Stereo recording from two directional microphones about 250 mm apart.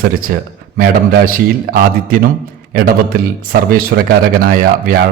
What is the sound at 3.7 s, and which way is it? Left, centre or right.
A man's voice, right.